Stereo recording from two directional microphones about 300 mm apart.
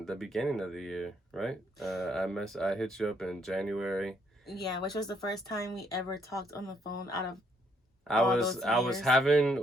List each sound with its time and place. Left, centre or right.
0.0 s speech: centre
4.6 s speech: centre
8.0 s speech: centre